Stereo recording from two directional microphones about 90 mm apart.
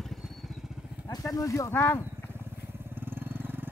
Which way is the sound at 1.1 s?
40° left (ahead or behind).